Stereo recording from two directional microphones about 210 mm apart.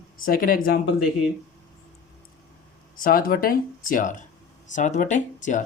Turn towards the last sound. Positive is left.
turn(degrees=35)  # may be behind; listen again after turning